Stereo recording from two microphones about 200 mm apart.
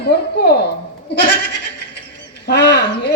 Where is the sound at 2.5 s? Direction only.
55° left (ahead or behind).